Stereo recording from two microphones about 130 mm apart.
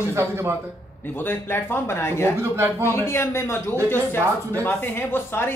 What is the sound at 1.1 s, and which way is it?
A woman's voice, 15° left (ahead or behind).